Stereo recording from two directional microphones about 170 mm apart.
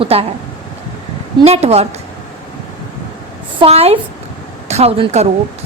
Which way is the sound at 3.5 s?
35° right (ahead or behind).